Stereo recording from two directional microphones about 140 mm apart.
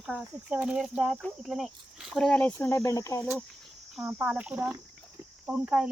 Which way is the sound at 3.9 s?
5° right (ahead or behind).